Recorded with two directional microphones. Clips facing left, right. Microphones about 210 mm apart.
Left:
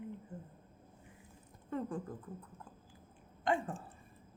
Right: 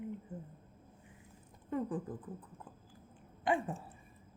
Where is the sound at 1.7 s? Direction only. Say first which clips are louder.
Right 2 dB; 15° right (ahead or behind).